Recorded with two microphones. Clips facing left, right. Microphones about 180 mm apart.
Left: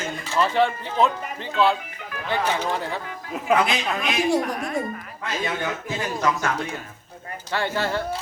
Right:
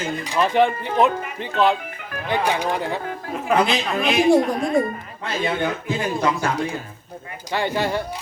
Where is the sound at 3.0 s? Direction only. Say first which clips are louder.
Right 4 dB; 45° right (ahead or behind).